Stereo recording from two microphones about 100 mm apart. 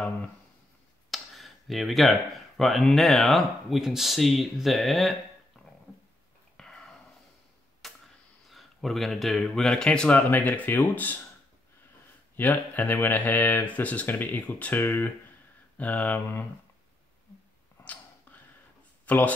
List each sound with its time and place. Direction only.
1.1 s speech: centre (ahead or behind)
6.5 s a sound: 5° left (ahead or behind)
8.5 s speech: centre (ahead or behind); by 11.1 s 15° left (ahead or behind)
12.4 s speech: 15° left (ahead or behind)
19.0 s speech: 15° left (ahead or behind)